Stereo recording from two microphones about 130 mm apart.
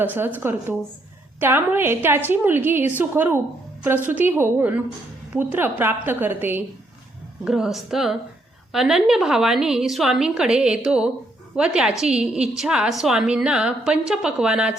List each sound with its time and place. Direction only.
0.0 s a woman's voice: 15° right (ahead or behind)
7.4 s a woman's voice: 5° right (ahead or behind)